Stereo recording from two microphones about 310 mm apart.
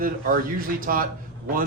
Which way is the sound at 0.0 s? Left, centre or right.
Right.